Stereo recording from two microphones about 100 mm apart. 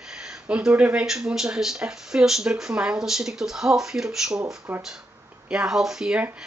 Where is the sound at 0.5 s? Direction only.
10° right (ahead or behind).